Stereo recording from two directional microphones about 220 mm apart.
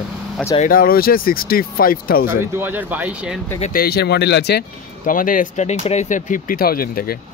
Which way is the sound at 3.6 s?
40° left (ahead or behind).